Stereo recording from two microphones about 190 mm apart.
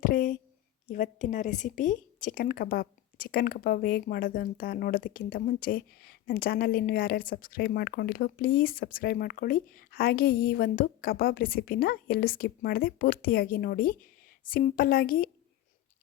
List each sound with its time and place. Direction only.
0.0 s speech: 45° left (ahead or behind)